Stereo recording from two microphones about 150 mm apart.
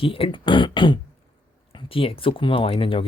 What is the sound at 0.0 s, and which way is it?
Speech, 35° left (ahead or behind).